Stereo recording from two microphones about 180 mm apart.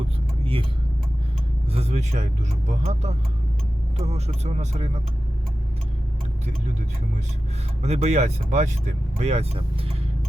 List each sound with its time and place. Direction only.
1.7 s speech: 35° right (ahead or behind)
7.8 s speech: 35° right (ahead or behind)